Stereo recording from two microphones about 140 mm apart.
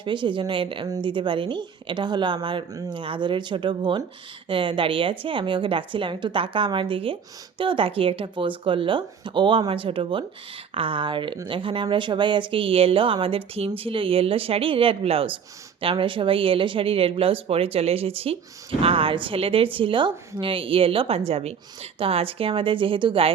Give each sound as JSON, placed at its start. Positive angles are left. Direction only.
{"t": 0.0, "sound": "speech", "side_deg": -35}